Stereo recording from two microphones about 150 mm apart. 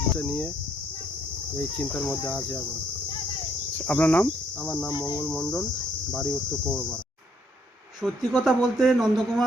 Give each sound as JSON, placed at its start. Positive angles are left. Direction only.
{"t": 0.2, "sound": "speech", "side_deg": 10}
{"t": 1.5, "sound": "speech", "side_deg": 5}
{"t": 3.8, "sound": "speech", "side_deg": 10}
{"t": 4.9, "sound": "cricket", "side_deg": 25}
{"t": 5.2, "sound": "speech", "side_deg": 5}
{"t": 8.0, "sound": "speech", "side_deg": 0}